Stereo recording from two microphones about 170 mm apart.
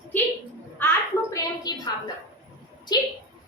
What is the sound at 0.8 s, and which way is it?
Speech, 10° left (ahead or behind).